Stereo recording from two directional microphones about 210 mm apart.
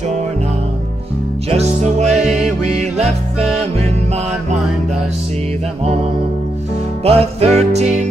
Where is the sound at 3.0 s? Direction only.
30° right (ahead or behind).